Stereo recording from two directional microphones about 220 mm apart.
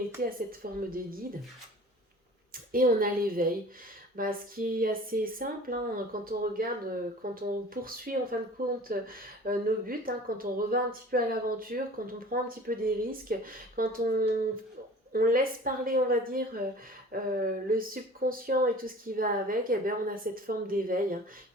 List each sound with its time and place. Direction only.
0.2 s speech: 40° right (ahead or behind)
2.7 s speech: 40° right (ahead or behind)